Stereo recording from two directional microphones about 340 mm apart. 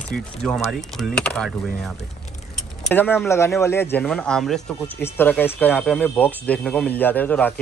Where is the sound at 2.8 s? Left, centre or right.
Centre.